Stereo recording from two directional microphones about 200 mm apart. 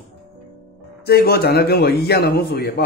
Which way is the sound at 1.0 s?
50° left (ahead or behind).